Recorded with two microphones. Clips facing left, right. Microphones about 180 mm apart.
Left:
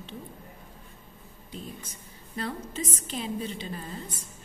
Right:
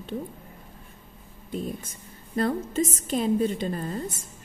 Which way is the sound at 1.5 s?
50° right (ahead or behind).